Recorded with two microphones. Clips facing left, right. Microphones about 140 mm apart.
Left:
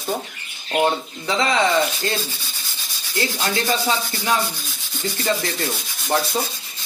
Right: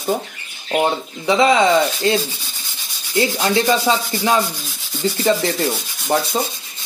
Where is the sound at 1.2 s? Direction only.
15° right (ahead or behind).